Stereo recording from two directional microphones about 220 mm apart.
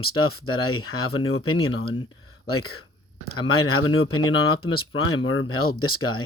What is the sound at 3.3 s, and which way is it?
Speech, 75° left (ahead or behind).